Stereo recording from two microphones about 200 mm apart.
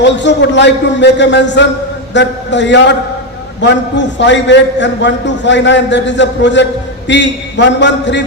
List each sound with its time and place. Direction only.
0.0 s a man's voice: 60° left (ahead or behind)